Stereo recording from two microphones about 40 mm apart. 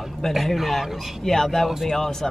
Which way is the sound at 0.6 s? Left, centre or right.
Centre.